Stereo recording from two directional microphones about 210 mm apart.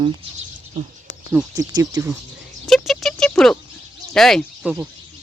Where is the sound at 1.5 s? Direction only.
15° right (ahead or behind).